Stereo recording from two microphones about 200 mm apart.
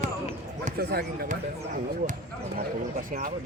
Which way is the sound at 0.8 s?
50° right (ahead or behind).